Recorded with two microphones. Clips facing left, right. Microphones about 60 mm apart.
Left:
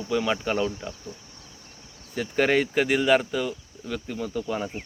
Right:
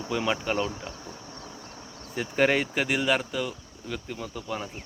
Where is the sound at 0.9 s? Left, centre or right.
Right.